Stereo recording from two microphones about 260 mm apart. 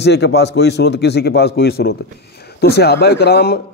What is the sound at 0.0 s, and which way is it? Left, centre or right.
A man's voice, left.